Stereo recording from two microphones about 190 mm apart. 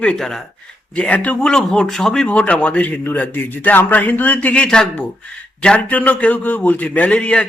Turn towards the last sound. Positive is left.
turn(degrees=5)  # may be behind; listen again after turning